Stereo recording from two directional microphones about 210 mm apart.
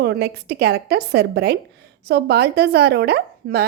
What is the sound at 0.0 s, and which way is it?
Speech, 50° right (ahead or behind).